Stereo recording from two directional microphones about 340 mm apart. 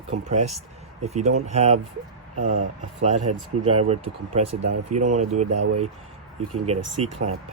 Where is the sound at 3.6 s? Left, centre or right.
Centre.